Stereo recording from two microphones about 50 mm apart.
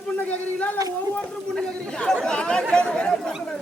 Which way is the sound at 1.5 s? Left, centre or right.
Centre.